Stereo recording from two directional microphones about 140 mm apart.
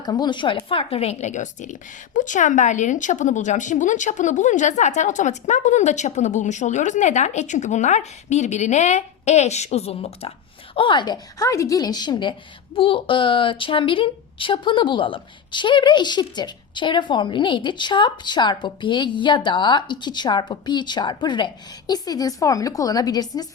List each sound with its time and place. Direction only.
0.0 s a woman's voice: 30° left (ahead or behind); by 10.3 s 45° left (ahead or behind)
10.8 s a woman's voice: 35° left (ahead or behind)